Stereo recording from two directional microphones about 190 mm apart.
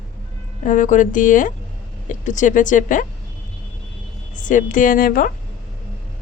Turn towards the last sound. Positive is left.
turn(degrees=45)  # may be behind; listen again after turning